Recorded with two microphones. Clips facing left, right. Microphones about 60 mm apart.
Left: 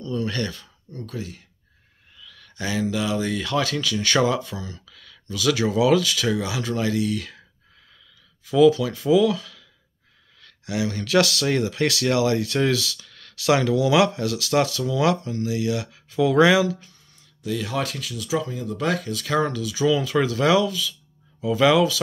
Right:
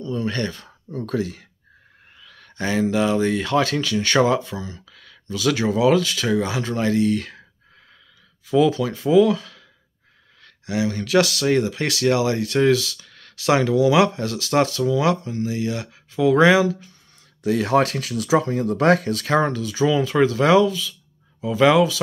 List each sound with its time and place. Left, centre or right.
0.0 s speech: right
0.7 s speech: right
2.1 s speech: right
8.5 s speech: right
17.5 s speech: right
19.2 s speech: right